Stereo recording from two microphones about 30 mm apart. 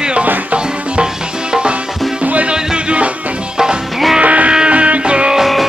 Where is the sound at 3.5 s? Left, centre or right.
Right.